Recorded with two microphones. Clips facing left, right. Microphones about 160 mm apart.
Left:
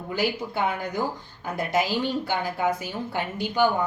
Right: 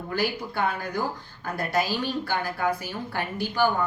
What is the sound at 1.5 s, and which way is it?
Speech, 20° left (ahead or behind).